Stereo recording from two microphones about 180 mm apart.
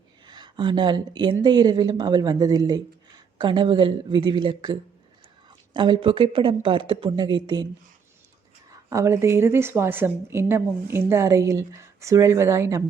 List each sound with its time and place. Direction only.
0.3 s speech: 25° right (ahead or behind)
8.9 s a woman's voice: 15° right (ahead or behind)